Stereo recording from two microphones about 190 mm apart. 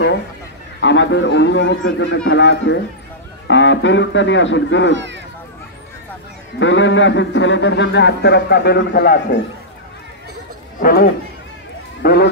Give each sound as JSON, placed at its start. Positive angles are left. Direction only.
{"t": 0.7, "sound": "a man's voice", "side_deg": 75}
{"t": 2.2, "sound": "a man's voice", "side_deg": 75}
{"t": 4.9, "sound": "speech", "side_deg": -70}
{"t": 6.6, "sound": "a man's voice", "side_deg": 75}
{"t": 10.8, "sound": "speech", "side_deg": 50}